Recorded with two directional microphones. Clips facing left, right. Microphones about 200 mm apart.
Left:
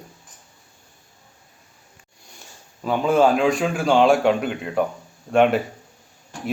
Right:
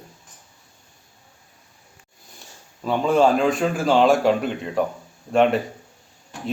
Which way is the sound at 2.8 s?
5° left (ahead or behind).